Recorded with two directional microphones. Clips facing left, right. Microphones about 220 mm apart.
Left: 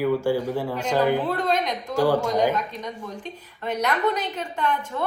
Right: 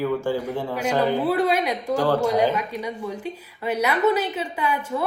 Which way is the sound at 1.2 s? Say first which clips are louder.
Right 3 dB; 10° right (ahead or behind).